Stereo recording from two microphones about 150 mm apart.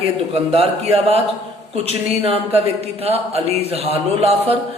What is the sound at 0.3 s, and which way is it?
A man's voice, 40° right (ahead or behind).